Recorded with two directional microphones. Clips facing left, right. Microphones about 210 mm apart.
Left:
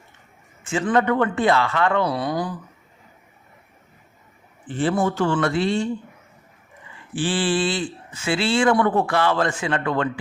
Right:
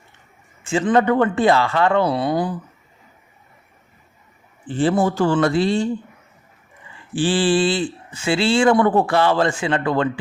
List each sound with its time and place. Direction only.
0.6 s speech: 30° right (ahead or behind)
4.6 s speech: 30° right (ahead or behind)
7.1 s speech: 30° right (ahead or behind)